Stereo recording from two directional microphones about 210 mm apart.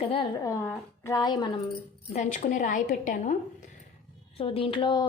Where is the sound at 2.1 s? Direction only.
35° left (ahead or behind).